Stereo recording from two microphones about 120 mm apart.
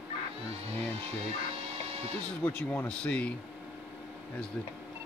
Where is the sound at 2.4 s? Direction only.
15° left (ahead or behind).